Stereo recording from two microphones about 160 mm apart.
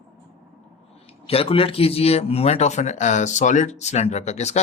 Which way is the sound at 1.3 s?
35° left (ahead or behind).